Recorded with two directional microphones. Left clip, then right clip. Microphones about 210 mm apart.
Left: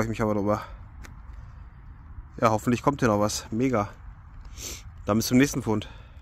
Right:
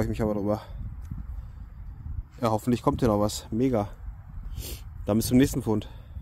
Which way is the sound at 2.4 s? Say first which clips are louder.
Left 3 dB; 5° right (ahead or behind).